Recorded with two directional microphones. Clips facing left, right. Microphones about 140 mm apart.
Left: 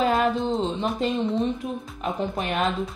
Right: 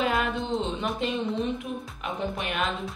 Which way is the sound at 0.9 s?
40° left (ahead or behind).